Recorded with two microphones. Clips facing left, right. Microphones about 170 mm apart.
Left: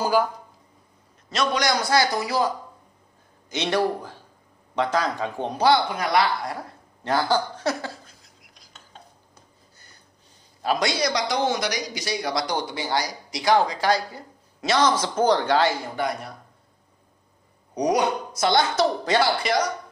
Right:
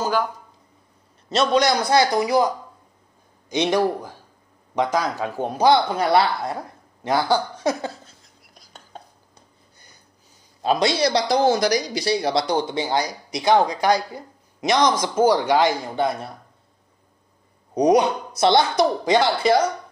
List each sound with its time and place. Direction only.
1.3 s speech: 25° right (ahead or behind); by 5.7 s 5° right (ahead or behind)
5.9 s speech: 30° right (ahead or behind)
7.0 s speech: 10° right (ahead or behind)
10.6 s speech: 25° right (ahead or behind)
16.0 s speech: 25° right (ahead or behind)
17.7 s speech: 25° right (ahead or behind)